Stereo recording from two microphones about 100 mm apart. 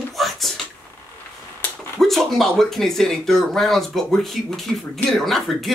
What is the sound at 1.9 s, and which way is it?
Speech, 5° left (ahead or behind).